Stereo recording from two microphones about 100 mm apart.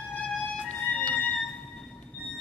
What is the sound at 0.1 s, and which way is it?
Music, 15° left (ahead or behind).